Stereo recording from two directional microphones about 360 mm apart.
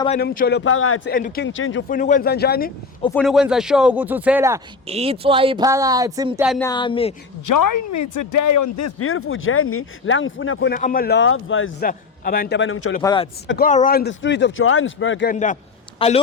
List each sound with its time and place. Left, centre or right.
0.0 s speech: left
3.0 s speech: centre
6.6 s speech: centre
7.4 s speech: left
13.0 s speech: centre
13.5 s a man's voice: left